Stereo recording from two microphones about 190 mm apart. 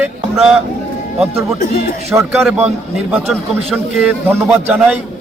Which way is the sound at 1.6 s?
50° left (ahead or behind).